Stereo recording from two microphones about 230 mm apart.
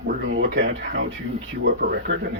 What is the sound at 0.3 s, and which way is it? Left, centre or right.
Speech, right.